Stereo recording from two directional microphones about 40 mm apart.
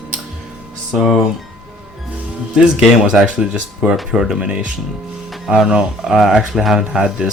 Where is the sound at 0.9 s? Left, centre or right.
Centre.